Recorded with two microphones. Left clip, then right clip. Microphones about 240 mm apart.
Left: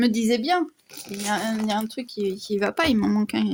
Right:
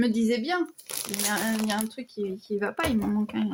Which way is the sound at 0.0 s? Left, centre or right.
Left.